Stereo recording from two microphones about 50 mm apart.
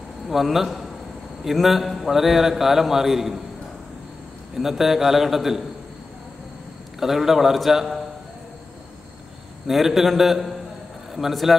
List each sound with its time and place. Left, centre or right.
0.3 s a man's voice: centre
4.6 s a man's voice: centre
7.0 s a man's voice: centre
9.7 s a man's voice: centre